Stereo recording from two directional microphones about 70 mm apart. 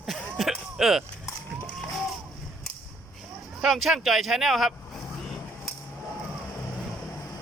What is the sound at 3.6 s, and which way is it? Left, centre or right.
Speech, centre.